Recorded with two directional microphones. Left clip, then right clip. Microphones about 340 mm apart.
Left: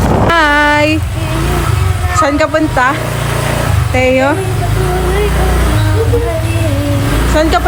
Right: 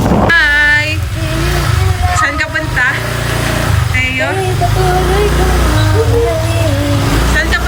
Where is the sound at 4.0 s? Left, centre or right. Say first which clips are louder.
Left 5 dB; centre.